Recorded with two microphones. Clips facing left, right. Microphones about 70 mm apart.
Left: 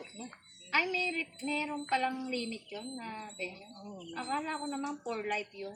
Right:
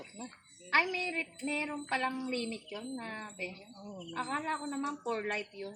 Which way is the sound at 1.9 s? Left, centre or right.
Right.